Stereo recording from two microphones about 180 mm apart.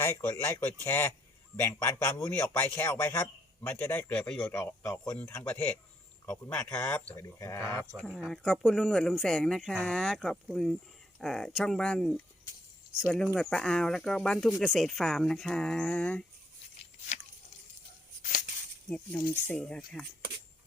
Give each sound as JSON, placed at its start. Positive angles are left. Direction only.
{"t": 0.0, "sound": "speech", "side_deg": 10}
{"t": 7.9, "sound": "speech", "side_deg": 0}
{"t": 18.2, "sound": "a sound", "side_deg": 45}
{"t": 18.9, "sound": "speech", "side_deg": 5}